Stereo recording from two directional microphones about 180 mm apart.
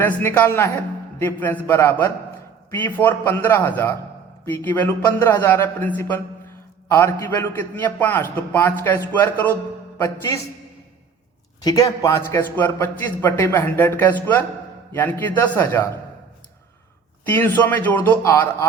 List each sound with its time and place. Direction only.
0.0 s a man's voice: 10° left (ahead or behind)
11.6 s a man's voice: 20° left (ahead or behind)
17.2 s a man's voice: 10° left (ahead or behind)